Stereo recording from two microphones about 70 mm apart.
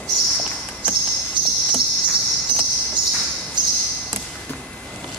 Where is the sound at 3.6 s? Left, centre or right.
Right.